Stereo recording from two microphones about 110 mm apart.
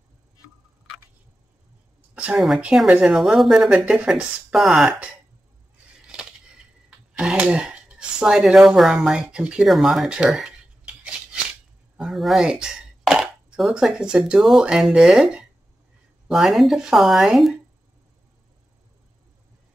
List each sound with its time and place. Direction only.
2.3 s speech: centre (ahead or behind)
7.2 s speech: 5° right (ahead or behind)
12.0 s speech: centre (ahead or behind)